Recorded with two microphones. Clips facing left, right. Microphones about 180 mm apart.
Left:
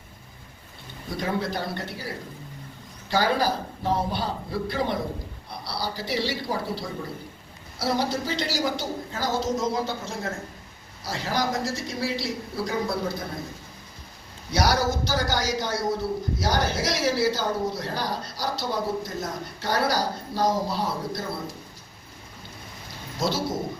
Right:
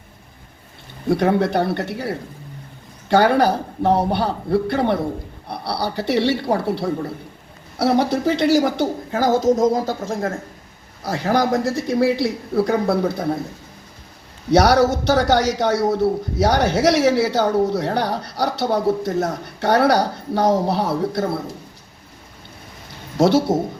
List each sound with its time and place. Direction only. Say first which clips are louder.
1.0 s speech: right 11 dB; 65° right (ahead or behind)
14.5 s a man's voice: right 9 dB; 70° right (ahead or behind)
23.1 s speech: right 12 dB; 65° right (ahead or behind)